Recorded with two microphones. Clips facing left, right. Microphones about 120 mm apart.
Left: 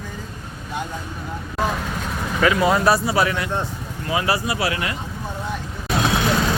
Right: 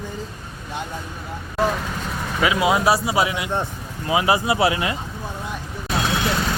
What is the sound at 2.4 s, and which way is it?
Speech, 10° right (ahead or behind).